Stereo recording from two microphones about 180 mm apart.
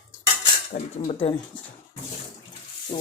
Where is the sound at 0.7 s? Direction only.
40° left (ahead or behind).